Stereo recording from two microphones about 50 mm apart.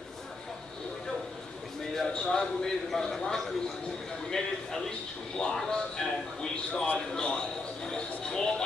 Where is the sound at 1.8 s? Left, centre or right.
Centre.